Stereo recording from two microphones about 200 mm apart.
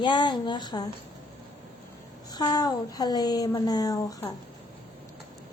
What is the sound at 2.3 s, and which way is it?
A woman's voice, 20° left (ahead or behind).